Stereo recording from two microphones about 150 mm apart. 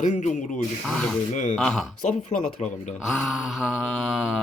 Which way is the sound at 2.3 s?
50° left (ahead or behind).